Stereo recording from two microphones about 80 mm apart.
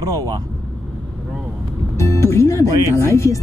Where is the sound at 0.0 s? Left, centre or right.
Right.